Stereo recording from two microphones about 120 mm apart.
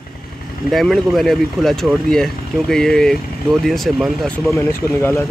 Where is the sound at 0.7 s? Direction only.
Centre (ahead or behind).